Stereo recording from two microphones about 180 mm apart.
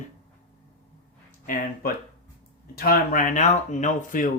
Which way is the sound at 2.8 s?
55° left (ahead or behind).